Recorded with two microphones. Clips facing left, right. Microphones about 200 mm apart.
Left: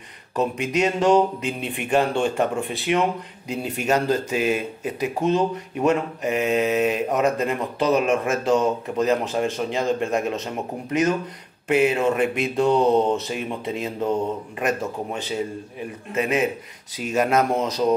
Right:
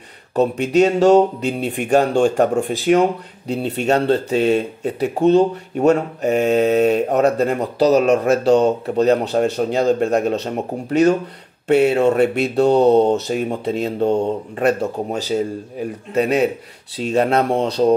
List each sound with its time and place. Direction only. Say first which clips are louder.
0.4 s speech: right 7 dB; 35° right (ahead or behind)